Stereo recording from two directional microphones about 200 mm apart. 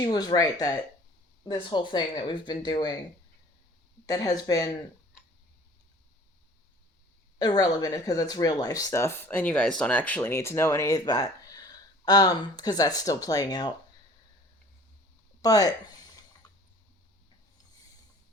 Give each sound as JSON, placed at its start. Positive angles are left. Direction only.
{"t": 0.0, "sound": "speech", "side_deg": 20}
{"t": 4.0, "sound": "speech", "side_deg": 20}
{"t": 7.3, "sound": "speech", "side_deg": 20}
{"t": 15.4, "sound": "a sound", "side_deg": 20}